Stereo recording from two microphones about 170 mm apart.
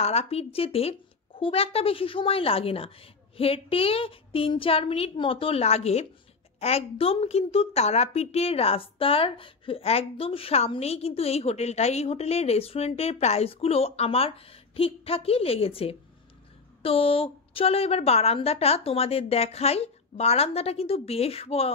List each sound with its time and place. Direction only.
0.0 s a woman's voice: 40° left (ahead or behind)